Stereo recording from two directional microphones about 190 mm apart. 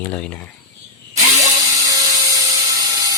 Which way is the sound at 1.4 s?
20° right (ahead or behind).